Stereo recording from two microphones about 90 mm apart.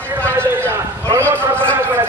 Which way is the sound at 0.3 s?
25° right (ahead or behind).